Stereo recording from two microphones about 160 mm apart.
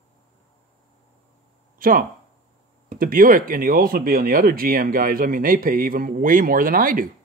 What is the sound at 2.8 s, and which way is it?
Speech, 65° right (ahead or behind).